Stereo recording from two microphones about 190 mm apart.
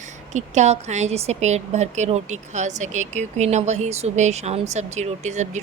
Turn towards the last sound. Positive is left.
turn(degrees=-40)  # may be behind; listen again after turning